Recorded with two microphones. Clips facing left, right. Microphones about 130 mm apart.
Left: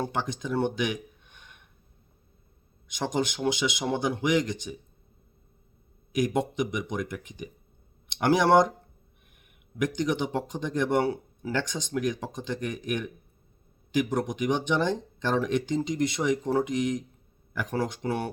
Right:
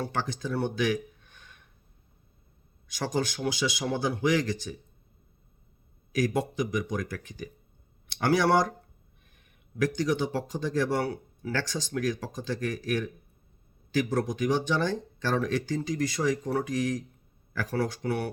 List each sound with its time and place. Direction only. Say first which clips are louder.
0.0 s speech: left 1 dB; 20° left (ahead or behind)
2.8 s speech: left 1 dB; 20° left (ahead or behind)
6.1 s speech: left 1 dB; 20° left (ahead or behind)